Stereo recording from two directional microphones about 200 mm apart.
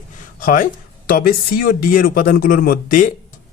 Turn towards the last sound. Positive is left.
turn(degrees=45)  # may be behind; listen again after turning